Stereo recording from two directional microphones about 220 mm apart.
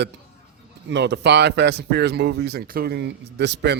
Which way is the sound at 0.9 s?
50° right (ahead or behind).